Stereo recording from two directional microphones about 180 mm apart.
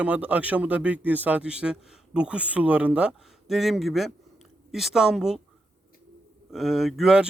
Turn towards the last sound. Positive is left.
turn(degrees=0)  # may be behind; listen again after turning